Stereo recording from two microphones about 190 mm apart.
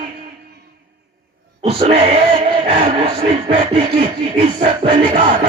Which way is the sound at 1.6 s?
30° right (ahead or behind).